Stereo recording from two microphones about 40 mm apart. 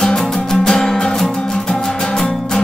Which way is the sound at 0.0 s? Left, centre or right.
Centre.